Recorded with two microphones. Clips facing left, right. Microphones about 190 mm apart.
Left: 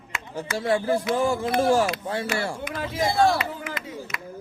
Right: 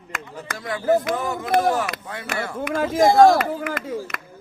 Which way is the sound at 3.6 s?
50° right (ahead or behind).